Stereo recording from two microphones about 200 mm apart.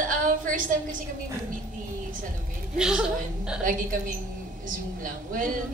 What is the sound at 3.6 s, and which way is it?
Speech, 45° right (ahead or behind).